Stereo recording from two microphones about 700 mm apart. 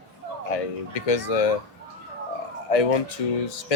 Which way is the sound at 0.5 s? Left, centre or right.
Left.